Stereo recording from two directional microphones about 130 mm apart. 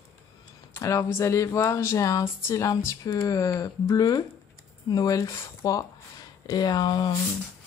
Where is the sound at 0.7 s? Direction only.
25° left (ahead or behind).